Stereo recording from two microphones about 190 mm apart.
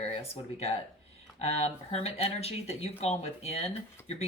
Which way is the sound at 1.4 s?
35° left (ahead or behind).